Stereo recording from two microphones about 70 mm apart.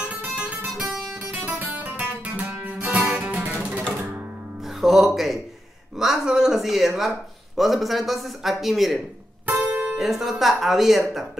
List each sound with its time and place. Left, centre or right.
0.2 s guitar: right
3.1 s music: right
4.8 s music: centre
5.9 s a man's voice: centre
9.5 s music: right
9.9 s a man's voice: centre